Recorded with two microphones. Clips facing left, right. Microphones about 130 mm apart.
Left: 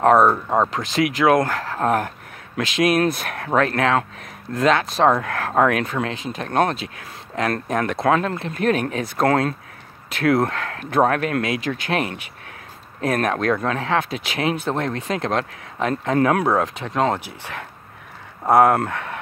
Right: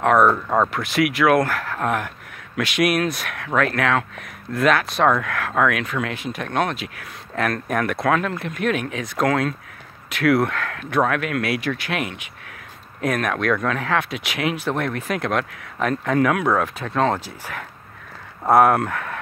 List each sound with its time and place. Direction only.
0.0 s speech: 35° left (ahead or behind)
0.5 s speech: 20° left (ahead or behind)
13.0 s speech: 35° left (ahead or behind)